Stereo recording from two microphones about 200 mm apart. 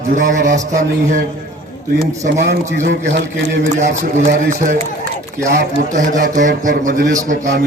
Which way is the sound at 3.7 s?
40° right (ahead or behind).